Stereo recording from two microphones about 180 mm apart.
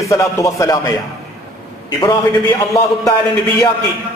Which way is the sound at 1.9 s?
20° left (ahead or behind).